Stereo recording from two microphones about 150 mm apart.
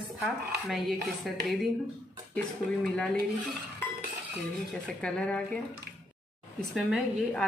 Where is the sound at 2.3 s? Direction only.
5° left (ahead or behind).